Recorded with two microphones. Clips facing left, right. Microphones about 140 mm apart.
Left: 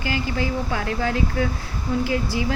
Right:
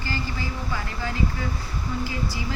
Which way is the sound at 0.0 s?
65° left (ahead or behind).